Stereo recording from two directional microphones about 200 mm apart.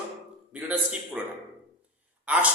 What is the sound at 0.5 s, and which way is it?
Speech, 5° right (ahead or behind).